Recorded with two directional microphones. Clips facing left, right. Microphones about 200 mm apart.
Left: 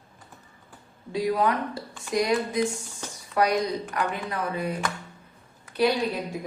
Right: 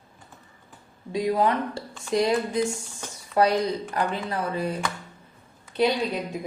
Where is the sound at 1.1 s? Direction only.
20° right (ahead or behind).